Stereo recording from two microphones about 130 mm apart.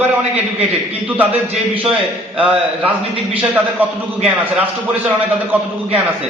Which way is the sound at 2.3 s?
10° right (ahead or behind).